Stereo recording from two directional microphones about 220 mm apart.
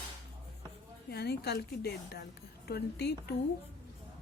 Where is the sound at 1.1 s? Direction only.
45° left (ahead or behind).